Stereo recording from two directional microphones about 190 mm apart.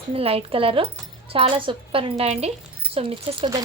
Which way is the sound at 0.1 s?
30° right (ahead or behind).